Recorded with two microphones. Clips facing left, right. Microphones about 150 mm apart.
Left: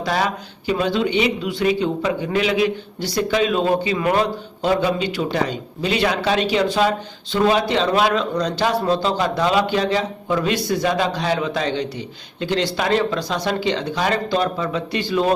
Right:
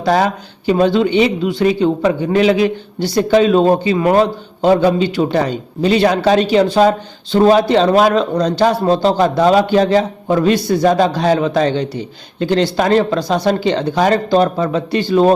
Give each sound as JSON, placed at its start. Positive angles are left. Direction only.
{"t": 0.0, "sound": "a man's voice", "side_deg": -45}
{"t": 4.9, "sound": "a man's voice", "side_deg": -30}